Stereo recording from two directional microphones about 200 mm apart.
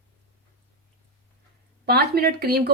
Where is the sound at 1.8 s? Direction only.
50° right (ahead or behind).